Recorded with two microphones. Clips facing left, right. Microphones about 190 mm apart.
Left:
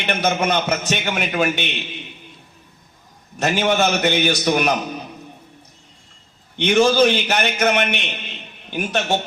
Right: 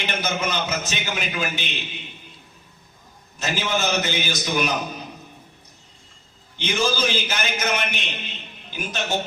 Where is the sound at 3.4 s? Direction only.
65° left (ahead or behind).